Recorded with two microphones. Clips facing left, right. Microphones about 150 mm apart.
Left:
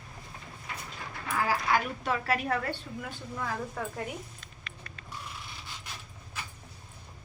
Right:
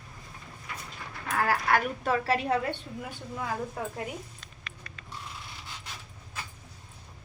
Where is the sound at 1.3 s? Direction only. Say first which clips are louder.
Right 2 dB; 65° right (ahead or behind).